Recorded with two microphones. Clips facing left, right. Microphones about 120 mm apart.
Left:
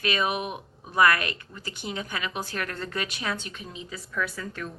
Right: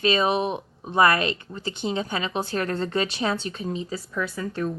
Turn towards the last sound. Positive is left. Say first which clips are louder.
# right 4 dB
turn(degrees=-25)  # may be behind; listen again after turning